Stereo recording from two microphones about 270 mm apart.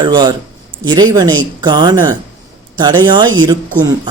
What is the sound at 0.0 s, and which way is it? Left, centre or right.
A man's voice, centre.